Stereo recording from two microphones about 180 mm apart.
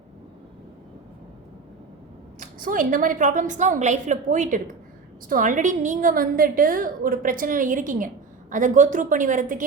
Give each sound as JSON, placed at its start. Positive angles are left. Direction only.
{"t": 2.4, "sound": "a woman's voice", "side_deg": -50}